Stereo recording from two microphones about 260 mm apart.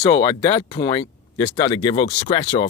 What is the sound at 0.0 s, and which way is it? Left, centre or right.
Speech, centre.